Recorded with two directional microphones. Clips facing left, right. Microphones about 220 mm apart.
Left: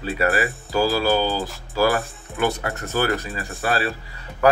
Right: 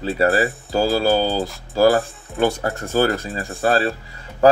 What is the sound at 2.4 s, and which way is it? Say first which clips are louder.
Speech: right 4 dB; 30° right (ahead or behind).